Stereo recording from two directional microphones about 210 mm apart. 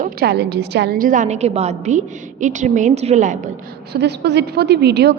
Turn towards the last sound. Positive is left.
turn(degrees=-50)  # may be behind; listen again after turning